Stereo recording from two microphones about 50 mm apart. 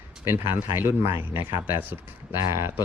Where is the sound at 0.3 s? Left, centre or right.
Right.